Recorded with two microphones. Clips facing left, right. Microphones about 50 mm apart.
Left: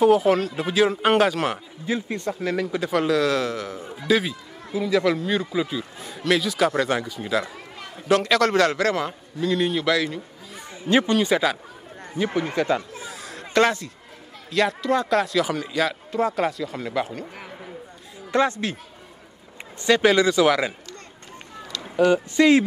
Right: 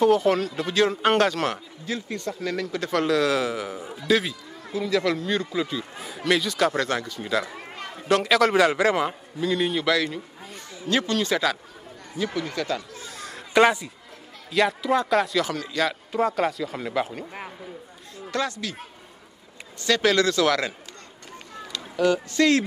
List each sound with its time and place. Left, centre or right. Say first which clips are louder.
0.0 s speech: left 2 dB; centre
1.9 s speech: left 4 dB; left; by 3.9 s centre
4.1 s speech: left 1 dB; centre
7.5 s speech: right 2 dB; centre
9.4 s a man's voice: left 2 dB; centre
10.8 s speech: left 4 dB; left
12.2 s speech: left 4 dB; left
13.0 s a sound: left 2 dB; centre
13.5 s speech: right 1 dB; centre
15.4 s speech: left 2 dB; centre
15.9 s speech: even; centre
18.3 s speech: left 6 dB; left
19.8 s speech: left 3 dB; centre
21.9 s speech: left 3 dB; centre